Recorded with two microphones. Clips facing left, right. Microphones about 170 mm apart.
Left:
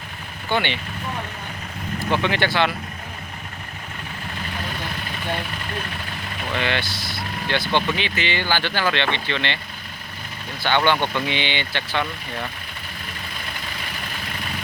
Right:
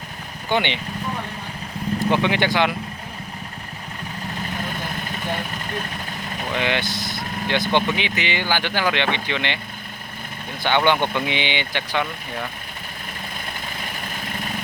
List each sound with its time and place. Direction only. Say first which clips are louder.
0.5 s speech: right 1 dB; 20° right (ahead or behind)
2.0 s speech: right 1 dB; 15° right (ahead or behind)
6.5 s speech: right 1 dB; 15° right (ahead or behind)
10.6 s speech: right 1 dB; 15° right (ahead or behind)